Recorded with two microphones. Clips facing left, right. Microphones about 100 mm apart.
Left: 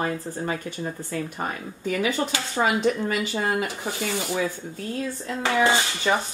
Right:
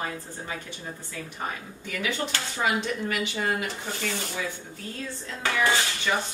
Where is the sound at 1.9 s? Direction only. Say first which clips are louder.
Left 6 dB; 40° left (ahead or behind).